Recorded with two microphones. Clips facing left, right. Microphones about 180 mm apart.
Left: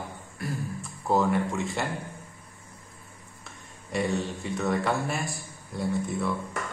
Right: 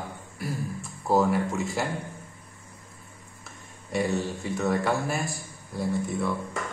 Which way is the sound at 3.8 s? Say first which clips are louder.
Right 1 dB; centre (ahead or behind).